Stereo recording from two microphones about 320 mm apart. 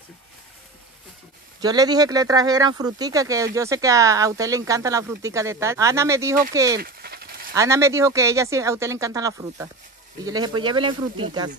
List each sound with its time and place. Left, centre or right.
1.6 s speech: centre
6.8 s a sound: right
7.5 s speech: centre